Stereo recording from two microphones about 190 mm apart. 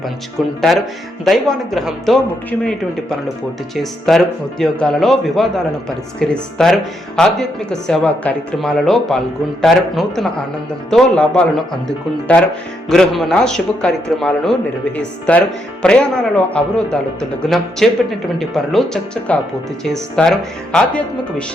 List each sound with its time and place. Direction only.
1.2 s speech: centre (ahead or behind)